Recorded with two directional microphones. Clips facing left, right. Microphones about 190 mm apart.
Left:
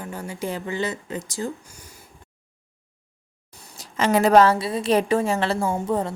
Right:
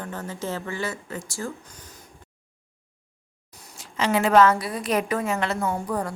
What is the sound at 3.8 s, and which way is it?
A woman's voice, 45° left (ahead or behind).